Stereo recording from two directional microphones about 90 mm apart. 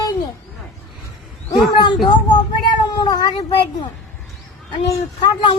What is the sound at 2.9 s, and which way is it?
Cat, 50° left (ahead or behind).